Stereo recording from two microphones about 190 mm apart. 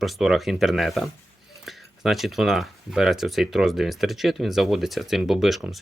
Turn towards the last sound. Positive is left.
turn(degrees=0)  # may be behind; listen again after turning